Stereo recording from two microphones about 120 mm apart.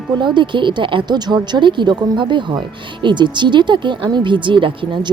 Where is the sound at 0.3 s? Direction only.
40° right (ahead or behind).